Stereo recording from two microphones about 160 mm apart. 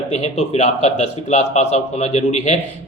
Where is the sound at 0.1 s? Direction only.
45° left (ahead or behind).